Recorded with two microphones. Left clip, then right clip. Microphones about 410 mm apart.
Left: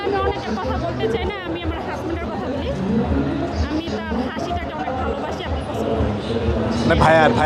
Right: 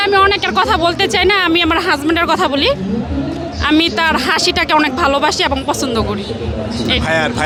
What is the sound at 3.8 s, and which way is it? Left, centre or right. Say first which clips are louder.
Speech: right 12 dB; right.